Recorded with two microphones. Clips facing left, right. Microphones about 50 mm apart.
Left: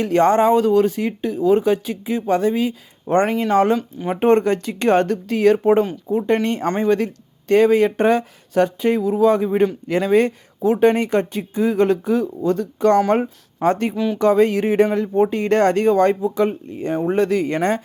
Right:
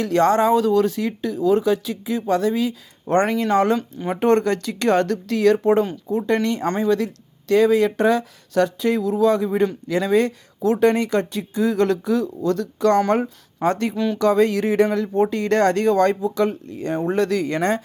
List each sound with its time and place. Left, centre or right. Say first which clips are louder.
0.0 s speech: left 2 dB; left
3.1 s speech: left 1 dB; centre
4.2 s speech: left 2 dB; left
13.7 s speech: left 2 dB; left
13.9 s speech: left 1 dB; centre
14.2 s speech: left 2 dB; left